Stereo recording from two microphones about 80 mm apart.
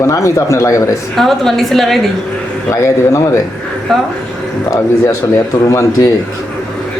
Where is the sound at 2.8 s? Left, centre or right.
Left.